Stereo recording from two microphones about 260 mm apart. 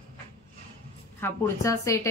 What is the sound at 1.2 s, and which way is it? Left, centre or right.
Speech, centre.